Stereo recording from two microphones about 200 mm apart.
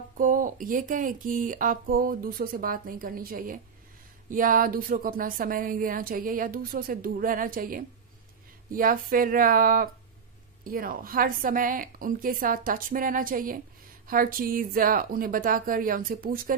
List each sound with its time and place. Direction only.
0.2 s speech: 40° right (ahead or behind)